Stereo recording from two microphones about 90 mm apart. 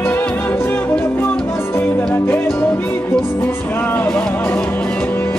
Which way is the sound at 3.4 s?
20° left (ahead or behind).